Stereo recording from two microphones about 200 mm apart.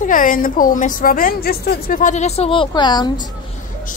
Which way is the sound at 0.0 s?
40° left (ahead or behind).